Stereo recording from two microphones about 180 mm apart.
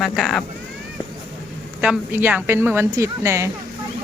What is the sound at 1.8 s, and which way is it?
Speech, 10° right (ahead or behind).